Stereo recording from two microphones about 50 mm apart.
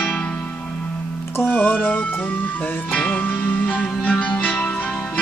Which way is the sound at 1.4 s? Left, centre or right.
Left.